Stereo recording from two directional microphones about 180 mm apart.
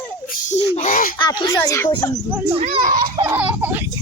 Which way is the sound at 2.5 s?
35° right (ahead or behind).